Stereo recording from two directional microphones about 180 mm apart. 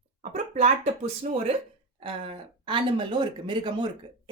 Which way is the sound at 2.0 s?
30° right (ahead or behind).